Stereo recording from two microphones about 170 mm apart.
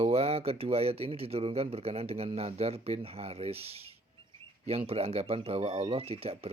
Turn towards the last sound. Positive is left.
turn(degrees=-35)  # may be behind; listen again after turning